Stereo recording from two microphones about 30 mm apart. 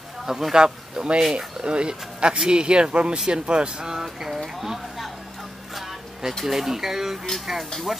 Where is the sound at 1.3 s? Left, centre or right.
Right.